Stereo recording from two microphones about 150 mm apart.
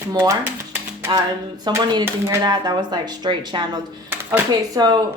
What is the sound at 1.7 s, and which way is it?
A woman's voice, 30° right (ahead or behind).